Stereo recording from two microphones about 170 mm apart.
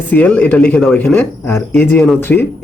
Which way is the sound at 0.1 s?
10° left (ahead or behind).